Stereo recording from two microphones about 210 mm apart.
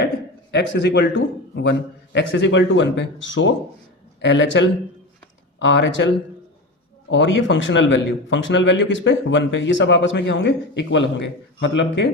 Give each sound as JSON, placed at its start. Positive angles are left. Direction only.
{"t": 0.5, "sound": "a man's voice", "side_deg": 55}
{"t": 7.1, "sound": "a man's voice", "side_deg": 60}